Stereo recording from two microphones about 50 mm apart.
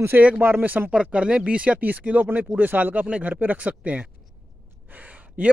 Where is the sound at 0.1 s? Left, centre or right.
Right.